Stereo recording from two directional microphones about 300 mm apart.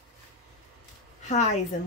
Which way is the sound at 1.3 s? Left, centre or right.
Left.